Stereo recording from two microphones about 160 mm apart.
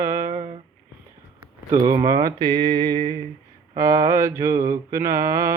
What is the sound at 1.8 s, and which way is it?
Mantra, 20° right (ahead or behind).